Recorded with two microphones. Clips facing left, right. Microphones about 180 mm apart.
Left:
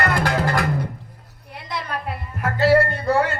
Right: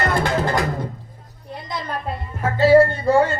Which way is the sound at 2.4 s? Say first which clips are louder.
Right 3 dB; 65° left (ahead or behind).